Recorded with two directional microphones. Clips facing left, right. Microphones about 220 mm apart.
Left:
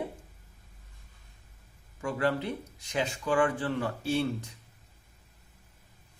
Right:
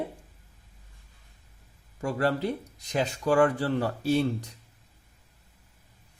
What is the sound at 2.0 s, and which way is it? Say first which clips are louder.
Speech: right 2 dB; 40° right (ahead or behind).